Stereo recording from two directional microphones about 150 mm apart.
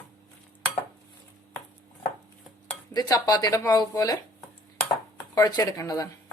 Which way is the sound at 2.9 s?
25° left (ahead or behind).